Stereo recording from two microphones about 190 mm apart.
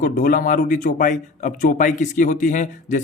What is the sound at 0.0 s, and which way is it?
Speech, 50° left (ahead or behind).